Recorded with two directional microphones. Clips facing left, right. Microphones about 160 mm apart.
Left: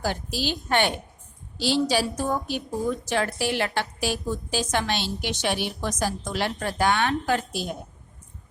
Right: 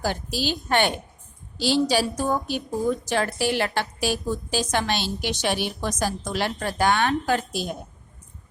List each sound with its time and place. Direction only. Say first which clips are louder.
0.0 s a woman's voice: right 1 dB; 40° right (ahead or behind)